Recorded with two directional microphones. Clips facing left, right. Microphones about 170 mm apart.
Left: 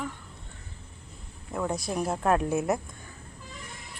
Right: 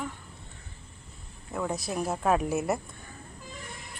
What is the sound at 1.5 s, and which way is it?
Speech, centre (ahead or behind).